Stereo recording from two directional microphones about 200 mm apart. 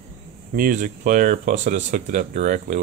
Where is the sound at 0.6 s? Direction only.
40° right (ahead or behind).